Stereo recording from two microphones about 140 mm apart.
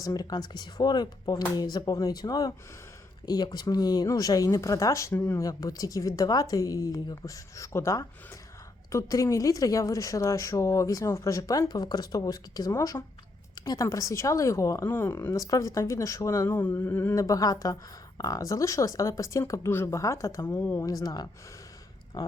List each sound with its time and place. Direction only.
0.0 s speech: 30° left (ahead or behind)